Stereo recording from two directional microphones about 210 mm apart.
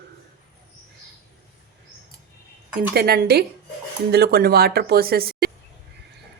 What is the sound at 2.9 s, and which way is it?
Speech, 45° right (ahead or behind).